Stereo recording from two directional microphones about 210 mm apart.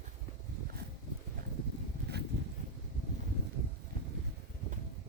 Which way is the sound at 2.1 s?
50° right (ahead or behind).